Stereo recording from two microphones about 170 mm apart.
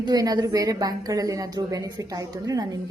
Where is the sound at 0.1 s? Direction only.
25° right (ahead or behind).